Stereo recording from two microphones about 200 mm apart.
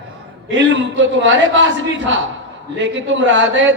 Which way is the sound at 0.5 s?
65° right (ahead or behind).